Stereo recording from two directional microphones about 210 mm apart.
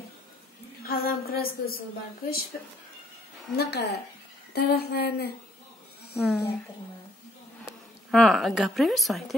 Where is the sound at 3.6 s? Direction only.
50° left (ahead or behind).